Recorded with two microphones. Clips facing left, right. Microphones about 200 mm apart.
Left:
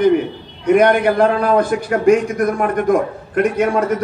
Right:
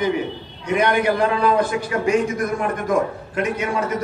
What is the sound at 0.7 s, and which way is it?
A man's voice, 55° left (ahead or behind).